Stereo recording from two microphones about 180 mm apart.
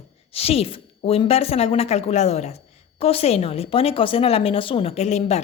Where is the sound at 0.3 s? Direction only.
35° left (ahead or behind).